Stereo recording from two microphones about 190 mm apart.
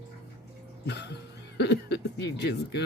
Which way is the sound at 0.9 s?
60° left (ahead or behind).